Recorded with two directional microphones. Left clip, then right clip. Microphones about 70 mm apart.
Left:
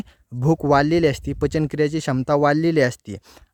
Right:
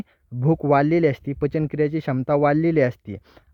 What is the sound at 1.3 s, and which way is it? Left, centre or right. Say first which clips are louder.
Speech: left 2 dB; left.